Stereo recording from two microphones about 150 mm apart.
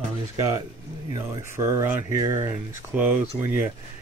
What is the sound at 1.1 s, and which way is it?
Speech, 20° right (ahead or behind).